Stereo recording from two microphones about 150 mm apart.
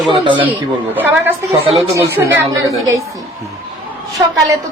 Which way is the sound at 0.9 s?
10° right (ahead or behind).